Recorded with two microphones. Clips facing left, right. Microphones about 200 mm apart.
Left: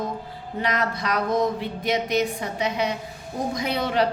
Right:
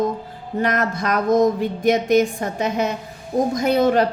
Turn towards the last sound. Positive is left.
turn(degrees=-45)  # may be behind; listen again after turning